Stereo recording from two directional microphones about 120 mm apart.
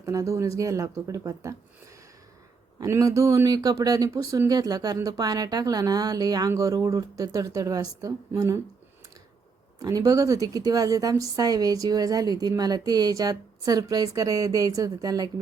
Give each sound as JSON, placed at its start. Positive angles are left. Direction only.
{"t": 0.0, "sound": "speech", "side_deg": -25}
{"t": 2.8, "sound": "a woman's voice", "side_deg": -25}
{"t": 9.8, "sound": "a woman's voice", "side_deg": -30}